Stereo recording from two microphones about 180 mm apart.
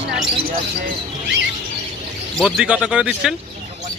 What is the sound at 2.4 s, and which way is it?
Speech, 5° right (ahead or behind).